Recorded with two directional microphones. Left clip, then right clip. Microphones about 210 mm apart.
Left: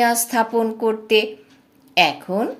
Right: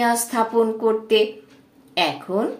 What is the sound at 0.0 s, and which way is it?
A woman's voice, 40° left (ahead or behind).